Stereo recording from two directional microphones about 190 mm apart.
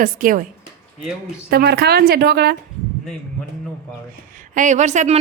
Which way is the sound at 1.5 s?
55° right (ahead or behind).